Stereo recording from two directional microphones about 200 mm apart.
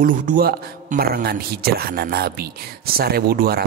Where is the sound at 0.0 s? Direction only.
40° right (ahead or behind).